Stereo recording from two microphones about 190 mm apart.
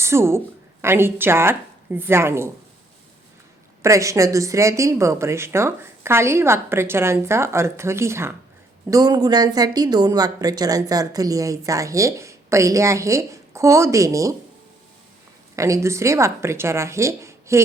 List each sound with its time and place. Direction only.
0.0 s speech: 15° right (ahead or behind)
3.8 s speech: 15° right (ahead or behind)
15.5 s speech: 15° right (ahead or behind)